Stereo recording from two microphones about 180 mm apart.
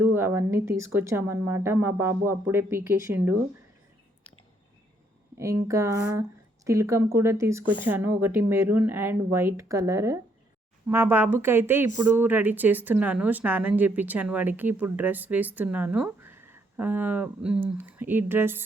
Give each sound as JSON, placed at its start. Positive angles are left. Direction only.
{"t": 0.0, "sound": "speech", "side_deg": -10}
{"t": 5.4, "sound": "speech", "side_deg": -15}